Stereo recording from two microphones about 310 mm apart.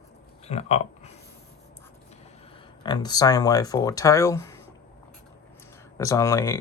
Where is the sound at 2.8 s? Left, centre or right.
Centre.